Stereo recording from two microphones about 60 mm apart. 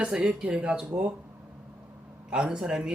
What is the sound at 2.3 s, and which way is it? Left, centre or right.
Speech, centre.